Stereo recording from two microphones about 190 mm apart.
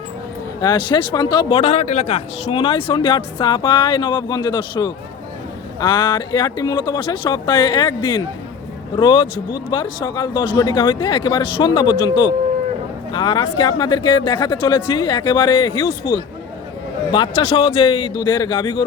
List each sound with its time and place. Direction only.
0.6 s speech: 25° left (ahead or behind)